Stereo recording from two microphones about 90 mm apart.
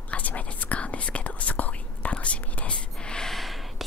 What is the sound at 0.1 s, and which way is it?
Whispering, 15° left (ahead or behind).